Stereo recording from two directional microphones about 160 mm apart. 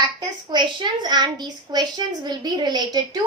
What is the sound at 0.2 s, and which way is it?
A woman's voice, 30° right (ahead or behind).